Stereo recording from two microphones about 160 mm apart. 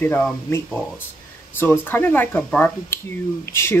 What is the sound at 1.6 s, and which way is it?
Speech, 15° left (ahead or behind).